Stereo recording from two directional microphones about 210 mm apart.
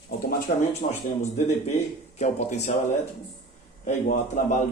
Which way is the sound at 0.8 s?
30° left (ahead or behind).